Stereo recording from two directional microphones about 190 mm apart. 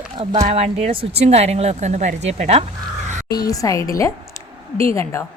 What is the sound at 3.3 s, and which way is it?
A woman's voice, 20° left (ahead or behind).